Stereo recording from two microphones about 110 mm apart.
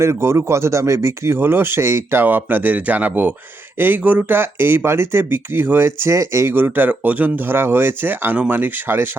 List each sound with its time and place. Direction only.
0.0 s speech: 25° right (ahead or behind)